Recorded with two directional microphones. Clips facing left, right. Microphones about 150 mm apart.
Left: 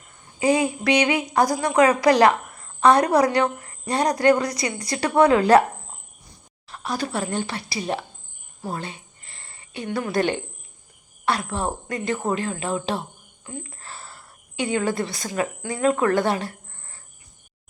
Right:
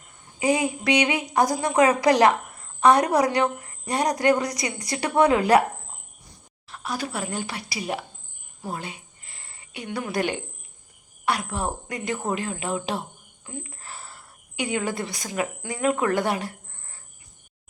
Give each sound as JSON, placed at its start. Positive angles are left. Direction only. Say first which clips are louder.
{"t": 0.3, "sound": "a woman's voice", "louder": "left 3 dB", "side_deg": -15}
{"t": 6.7, "sound": "a woman's voice", "louder": "left 3 dB", "side_deg": -5}
{"t": 8.6, "sound": "a sound", "louder": "left 2 dB", "side_deg": -15}
{"t": 11.3, "sound": "a woman's voice", "louder": "left 2 dB", "side_deg": -15}